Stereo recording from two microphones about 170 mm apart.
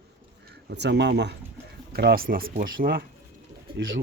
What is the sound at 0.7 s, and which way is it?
Speech, 90° right.